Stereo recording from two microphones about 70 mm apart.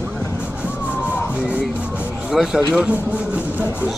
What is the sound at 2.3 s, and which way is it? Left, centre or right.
Speech, centre.